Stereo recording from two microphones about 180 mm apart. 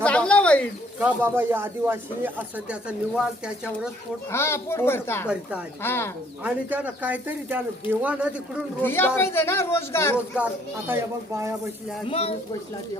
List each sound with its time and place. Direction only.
0.0 s a sound: 5° left (ahead or behind)
0.9 s speech: 10° right (ahead or behind)
4.3 s speech: 15° left (ahead or behind)
5.3 s speech: 10° right (ahead or behind)
5.8 s speech: 10° left (ahead or behind)
6.4 s speech: 10° right (ahead or behind)
8.8 s speech: 10° left (ahead or behind)
10.3 s speech: 10° right (ahead or behind)
12.0 s a child's voice: 30° left (ahead or behind)